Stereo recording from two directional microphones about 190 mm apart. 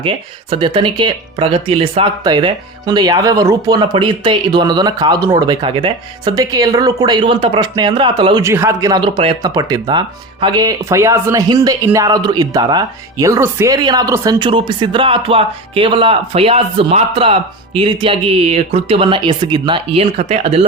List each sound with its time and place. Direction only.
0.5 s speech: 25° right (ahead or behind)